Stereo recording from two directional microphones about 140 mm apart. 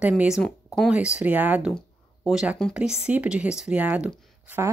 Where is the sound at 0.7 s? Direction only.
5° right (ahead or behind).